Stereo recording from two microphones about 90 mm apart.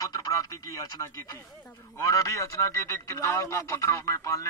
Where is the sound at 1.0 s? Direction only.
35° left (ahead or behind).